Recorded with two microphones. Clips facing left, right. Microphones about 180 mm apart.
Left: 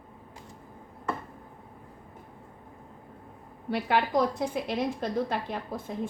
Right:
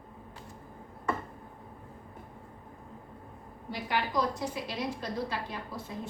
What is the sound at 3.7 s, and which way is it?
A woman's voice, 65° left (ahead or behind).